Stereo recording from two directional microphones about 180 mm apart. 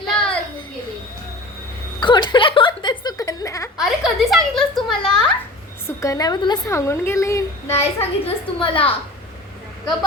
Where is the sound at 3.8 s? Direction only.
Centre (ahead or behind).